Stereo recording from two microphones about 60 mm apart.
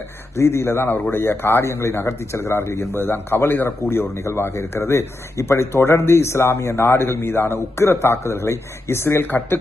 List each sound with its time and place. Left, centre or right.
0.3 s speech: left